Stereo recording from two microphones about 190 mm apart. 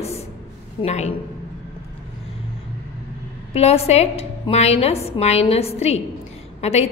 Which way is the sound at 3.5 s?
35° left (ahead or behind).